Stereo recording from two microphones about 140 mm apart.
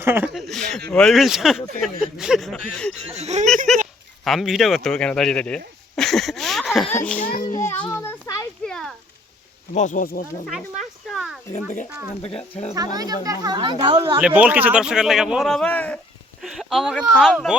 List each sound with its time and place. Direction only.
0.0 s speech: 15° right (ahead or behind)
0.3 s a sound: centre (ahead or behind)
0.7 s speech: 5° left (ahead or behind)
3.2 s speech: 50° right (ahead or behind)
3.7 s speech: centre (ahead or behind)
7.2 s speech: 80° left
7.6 s a child's voice: 15° left (ahead or behind)
8.6 s a sound: 5° left (ahead or behind)
9.7 s speech: 65° left (ahead or behind); by 10.2 s 90° left
10.4 s a sound: centre (ahead or behind)
12.7 s a woman's voice: 25° right (ahead or behind)
14.2 s speech: 5° right (ahead or behind); by 16.0 s 10° left (ahead or behind)
16.4 s speech: centre (ahead or behind)